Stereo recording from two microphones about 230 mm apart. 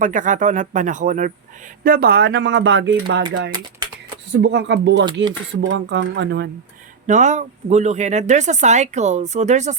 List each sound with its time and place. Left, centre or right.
0.0 s speech: right
4.3 s speech: right
7.1 s speech: right